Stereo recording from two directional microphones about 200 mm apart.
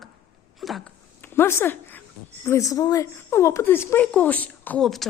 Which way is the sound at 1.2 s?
10° left (ahead or behind).